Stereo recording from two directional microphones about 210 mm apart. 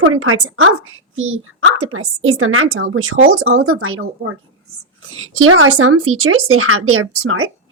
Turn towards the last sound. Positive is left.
turn(degrees=-90)